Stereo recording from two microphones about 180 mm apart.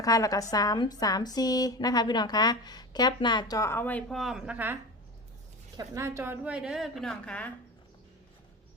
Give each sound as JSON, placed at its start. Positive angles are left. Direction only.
{"t": 0.0, "sound": "a woman's voice", "side_deg": 20}